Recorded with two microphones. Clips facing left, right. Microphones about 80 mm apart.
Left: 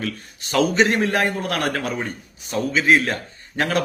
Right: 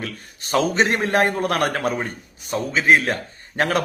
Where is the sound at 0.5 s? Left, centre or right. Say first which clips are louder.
Left 1 dB; right.